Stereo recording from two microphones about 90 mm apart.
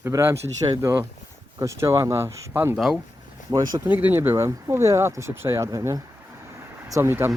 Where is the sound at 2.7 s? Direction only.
5° right (ahead or behind).